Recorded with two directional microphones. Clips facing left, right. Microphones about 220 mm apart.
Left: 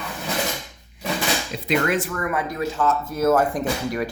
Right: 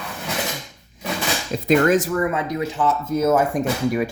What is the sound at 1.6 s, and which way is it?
Speech, 40° right (ahead or behind).